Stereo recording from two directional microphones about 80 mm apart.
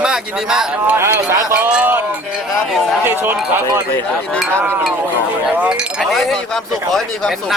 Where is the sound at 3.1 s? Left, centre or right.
Right.